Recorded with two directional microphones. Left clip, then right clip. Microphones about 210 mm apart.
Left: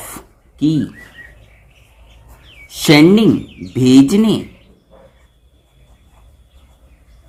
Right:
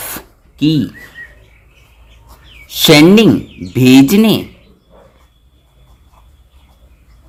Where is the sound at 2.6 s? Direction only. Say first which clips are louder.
Right 3 dB; 35° right (ahead or behind).